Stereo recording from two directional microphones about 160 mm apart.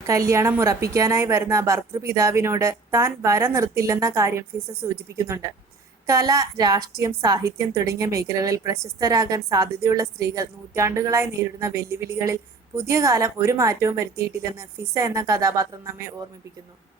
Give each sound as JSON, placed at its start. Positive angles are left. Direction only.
{"t": 0.1, "sound": "a woman's voice", "side_deg": -20}